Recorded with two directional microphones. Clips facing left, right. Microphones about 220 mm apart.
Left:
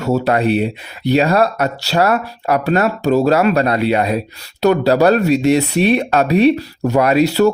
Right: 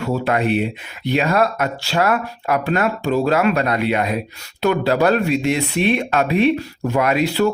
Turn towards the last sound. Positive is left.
turn(degrees=40)  # may be behind; listen again after turning